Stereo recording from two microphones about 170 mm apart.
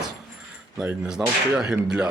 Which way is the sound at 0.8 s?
5° right (ahead or behind).